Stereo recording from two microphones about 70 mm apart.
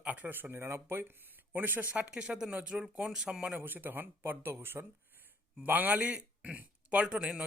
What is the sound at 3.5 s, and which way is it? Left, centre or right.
A man's voice, right.